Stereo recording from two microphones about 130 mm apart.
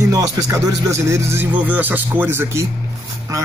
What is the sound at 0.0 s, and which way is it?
A man's voice, 25° right (ahead or behind).